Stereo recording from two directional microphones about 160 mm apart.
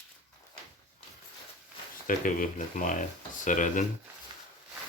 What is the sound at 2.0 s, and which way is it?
Speech, 55° left (ahead or behind).